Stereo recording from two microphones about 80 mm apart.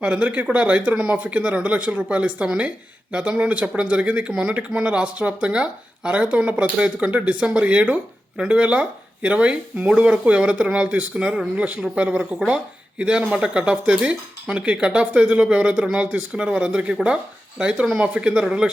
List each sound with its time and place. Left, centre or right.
0.0 s speech: centre